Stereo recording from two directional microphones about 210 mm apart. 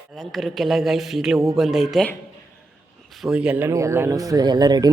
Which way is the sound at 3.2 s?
5° right (ahead or behind).